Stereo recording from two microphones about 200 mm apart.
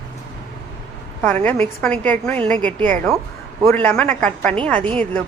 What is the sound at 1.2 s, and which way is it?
A woman's voice, 10° left (ahead or behind).